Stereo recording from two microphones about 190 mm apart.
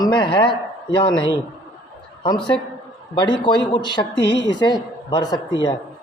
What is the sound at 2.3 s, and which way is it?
Speech, 25° left (ahead or behind).